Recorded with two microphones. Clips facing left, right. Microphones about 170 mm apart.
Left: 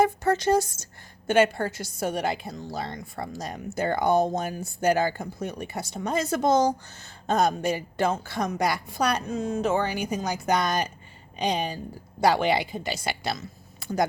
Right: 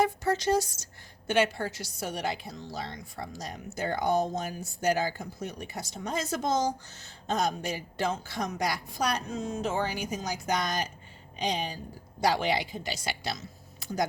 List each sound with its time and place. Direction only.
0.0 s a woman's voice: 55° left (ahead or behind)